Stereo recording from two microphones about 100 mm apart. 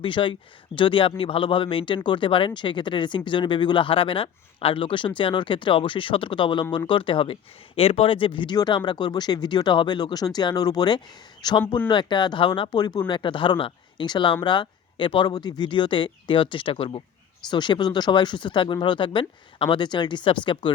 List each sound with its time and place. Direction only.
0.0 s speech: 55° left (ahead or behind)
7.8 s speech: 70° left (ahead or behind); by 15.3 s 55° left (ahead or behind)
15.3 s speech: 45° left (ahead or behind); by 17.0 s 60° left (ahead or behind)
17.5 s speech: 50° left (ahead or behind)